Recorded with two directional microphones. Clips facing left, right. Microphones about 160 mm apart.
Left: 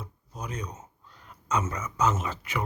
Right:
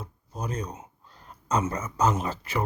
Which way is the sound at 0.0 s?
30° right (ahead or behind).